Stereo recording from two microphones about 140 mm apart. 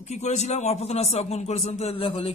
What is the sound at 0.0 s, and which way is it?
A man's voice, 55° left (ahead or behind).